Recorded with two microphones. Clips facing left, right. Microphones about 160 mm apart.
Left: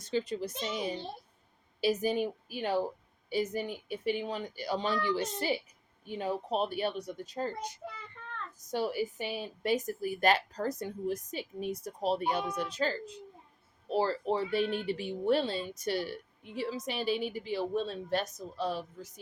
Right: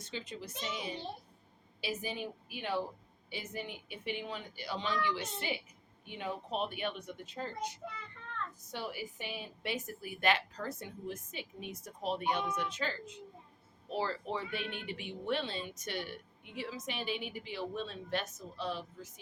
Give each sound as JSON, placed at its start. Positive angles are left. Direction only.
{"t": 0.0, "sound": "a woman's voice", "side_deg": 40}
{"t": 8.7, "sound": "a woman's voice", "side_deg": 40}